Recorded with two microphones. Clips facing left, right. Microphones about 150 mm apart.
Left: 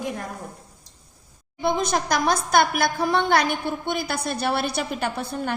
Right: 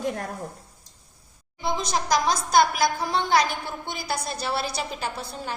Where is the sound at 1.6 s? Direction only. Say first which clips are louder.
Left 4 dB; 55° left (ahead or behind).